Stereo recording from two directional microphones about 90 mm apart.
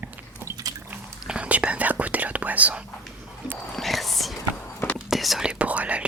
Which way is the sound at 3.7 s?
Centre (ahead or behind).